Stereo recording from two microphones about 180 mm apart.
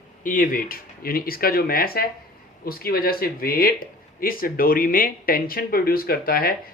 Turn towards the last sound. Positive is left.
turn(degrees=55)  # may be behind; listen again after turning